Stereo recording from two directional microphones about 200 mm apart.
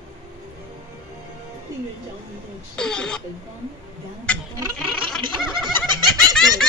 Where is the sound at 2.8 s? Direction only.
5° left (ahead or behind).